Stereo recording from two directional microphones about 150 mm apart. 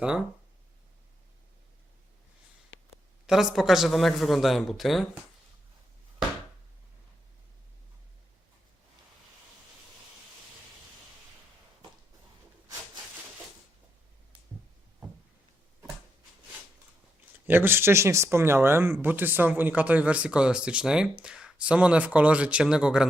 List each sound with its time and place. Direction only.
3.2 s speech: centre (ahead or behind)
17.4 s speech: 15° right (ahead or behind)